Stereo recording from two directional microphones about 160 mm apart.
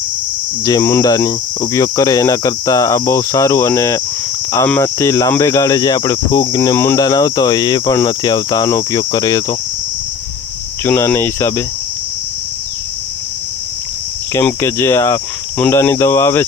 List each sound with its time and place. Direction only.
0.6 s cricket: 20° left (ahead or behind)
10.8 s cricket: 15° left (ahead or behind)
14.4 s cricket: 15° left (ahead or behind)